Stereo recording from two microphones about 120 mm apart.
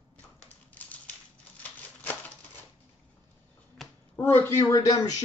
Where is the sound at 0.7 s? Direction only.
15° left (ahead or behind).